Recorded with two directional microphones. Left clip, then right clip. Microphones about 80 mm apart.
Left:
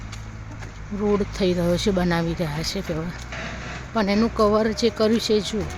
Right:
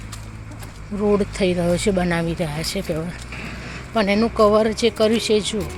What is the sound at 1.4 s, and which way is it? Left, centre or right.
Speech, left.